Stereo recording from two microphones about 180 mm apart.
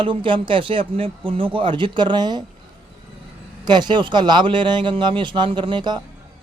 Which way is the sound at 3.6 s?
25° right (ahead or behind).